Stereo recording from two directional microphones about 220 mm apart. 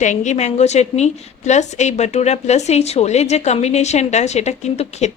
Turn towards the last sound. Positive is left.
turn(degrees=30)  # may be behind; listen again after turning